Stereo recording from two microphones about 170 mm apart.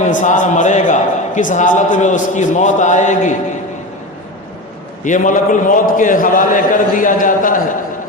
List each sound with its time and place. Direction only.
0.0 s a man's voice: 45° left (ahead or behind)
5.0 s a man's voice: 50° left (ahead or behind)